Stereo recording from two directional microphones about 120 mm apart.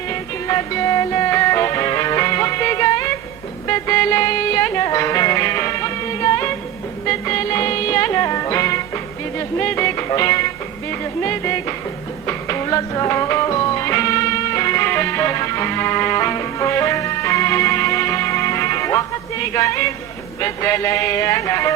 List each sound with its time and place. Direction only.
0.1 s music: 25° left (ahead or behind)
10.1 s speech: 25° left (ahead or behind)
12.3 s music: 25° left (ahead or behind)
20.4 s speech: 25° left (ahead or behind)